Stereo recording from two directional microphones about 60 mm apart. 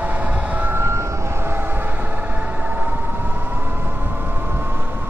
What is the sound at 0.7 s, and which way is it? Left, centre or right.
Vehicle, right.